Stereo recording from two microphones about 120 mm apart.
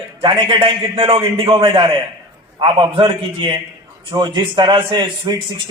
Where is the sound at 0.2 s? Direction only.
45° right (ahead or behind).